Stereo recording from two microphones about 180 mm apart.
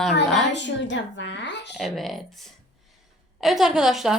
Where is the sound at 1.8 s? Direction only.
Centre (ahead or behind).